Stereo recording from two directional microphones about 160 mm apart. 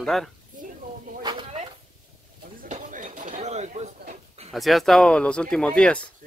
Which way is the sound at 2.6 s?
55° right (ahead or behind).